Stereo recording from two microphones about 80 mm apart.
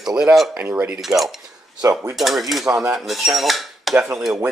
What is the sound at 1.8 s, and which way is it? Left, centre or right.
Speech, right.